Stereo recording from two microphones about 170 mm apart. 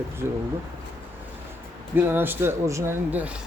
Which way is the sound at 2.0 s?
10° right (ahead or behind).